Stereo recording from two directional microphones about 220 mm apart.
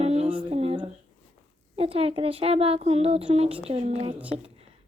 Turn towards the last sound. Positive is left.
turn(degrees=-25)  # may be behind; listen again after turning